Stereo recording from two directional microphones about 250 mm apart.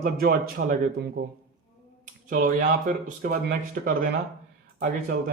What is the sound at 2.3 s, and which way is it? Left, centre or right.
Speech, right.